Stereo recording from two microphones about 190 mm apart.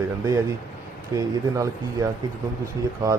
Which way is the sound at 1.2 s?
15° right (ahead or behind).